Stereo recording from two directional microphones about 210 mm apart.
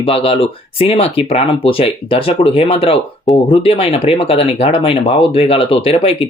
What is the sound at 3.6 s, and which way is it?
Speech, 25° left (ahead or behind).